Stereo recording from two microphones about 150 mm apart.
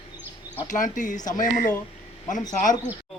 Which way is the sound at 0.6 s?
60° left (ahead or behind).